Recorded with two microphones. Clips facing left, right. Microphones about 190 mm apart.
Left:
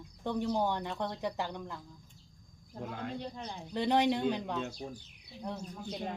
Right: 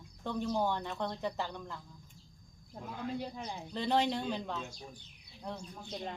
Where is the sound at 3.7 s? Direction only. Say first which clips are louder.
Left 3 dB; 15° left (ahead or behind).